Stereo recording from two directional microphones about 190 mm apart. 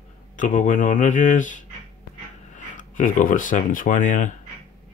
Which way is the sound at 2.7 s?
45° left (ahead or behind).